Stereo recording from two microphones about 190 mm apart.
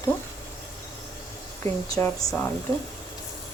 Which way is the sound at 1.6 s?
10° left (ahead or behind).